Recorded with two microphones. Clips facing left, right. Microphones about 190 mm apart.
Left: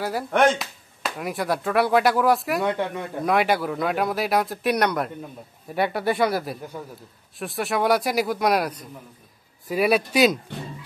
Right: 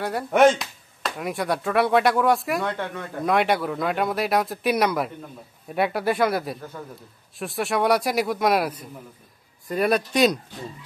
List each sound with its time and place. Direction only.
0.0 s speech: centre (ahead or behind)
2.6 s speech: 15° left (ahead or behind)
3.3 s speech: centre (ahead or behind)